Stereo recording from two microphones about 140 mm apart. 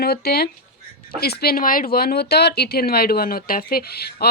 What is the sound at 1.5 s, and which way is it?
Speech, 90° left.